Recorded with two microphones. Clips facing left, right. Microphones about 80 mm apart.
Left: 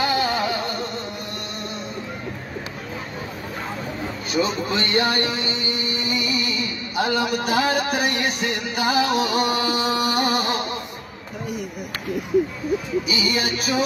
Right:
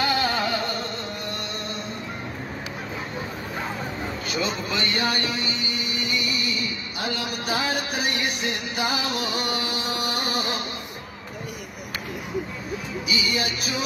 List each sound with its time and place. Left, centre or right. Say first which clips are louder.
0.0 s music: left 2 dB; centre
4.3 s speech: left 6 dB; left
5.9 s music: left 2 dB; left
13.0 s music: left 3 dB; left